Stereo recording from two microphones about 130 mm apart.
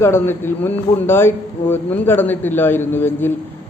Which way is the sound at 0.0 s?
20° left (ahead or behind).